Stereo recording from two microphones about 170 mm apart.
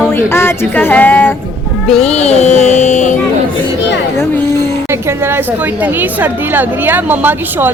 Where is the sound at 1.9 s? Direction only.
40° left (ahead or behind).